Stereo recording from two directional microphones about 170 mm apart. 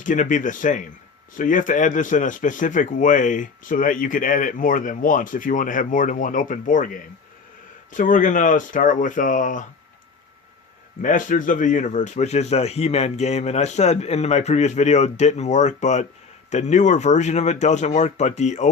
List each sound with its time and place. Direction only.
0.0 s speech: 50° left (ahead or behind)
11.0 s speech: 50° left (ahead or behind)